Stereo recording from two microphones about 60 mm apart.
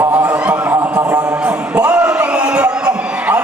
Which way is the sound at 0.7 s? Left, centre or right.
Right.